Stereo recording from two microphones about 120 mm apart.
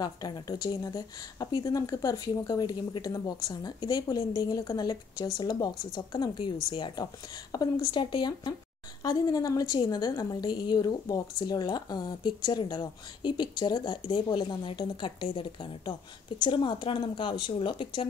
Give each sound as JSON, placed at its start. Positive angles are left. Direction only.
{"t": 0.0, "sound": "a woman's voice", "side_deg": 30}